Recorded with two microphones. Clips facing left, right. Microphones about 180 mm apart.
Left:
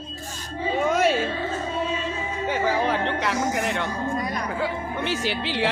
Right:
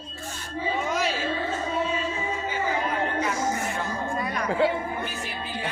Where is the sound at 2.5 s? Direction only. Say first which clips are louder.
Left 6 dB; 80° left.